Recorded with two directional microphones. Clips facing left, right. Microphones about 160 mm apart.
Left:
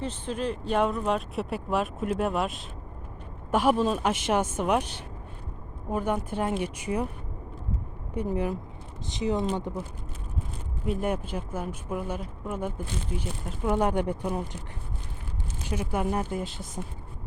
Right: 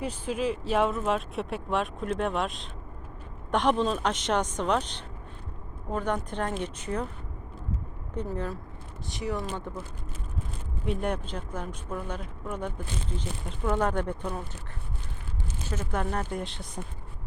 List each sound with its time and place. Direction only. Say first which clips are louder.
0.0 s speech: right 1 dB; 10° right (ahead or behind); by 7.1 s 10° left (ahead or behind)
8.1 s speech: left 4 dB; 10° left (ahead or behind)
10.8 s speech: left 2 dB; 5° left (ahead or behind)
15.6 s speech: left 3 dB; 15° left (ahead or behind)